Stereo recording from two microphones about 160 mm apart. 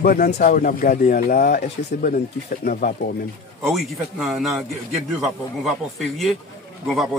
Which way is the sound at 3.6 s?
Centre (ahead or behind).